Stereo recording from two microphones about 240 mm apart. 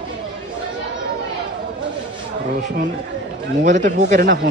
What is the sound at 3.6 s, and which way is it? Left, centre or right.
Speech, right.